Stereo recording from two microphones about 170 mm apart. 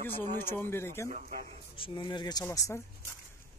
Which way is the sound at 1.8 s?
30° left (ahead or behind).